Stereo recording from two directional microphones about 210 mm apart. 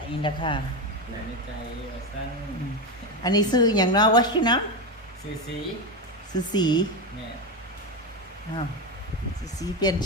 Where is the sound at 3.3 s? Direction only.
20° left (ahead or behind).